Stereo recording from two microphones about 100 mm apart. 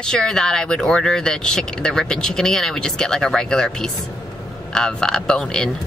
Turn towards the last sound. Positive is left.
turn(degrees=5)  # may be behind; listen again after turning